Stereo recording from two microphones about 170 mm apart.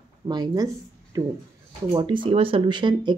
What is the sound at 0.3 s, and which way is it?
Speech, 25° right (ahead or behind).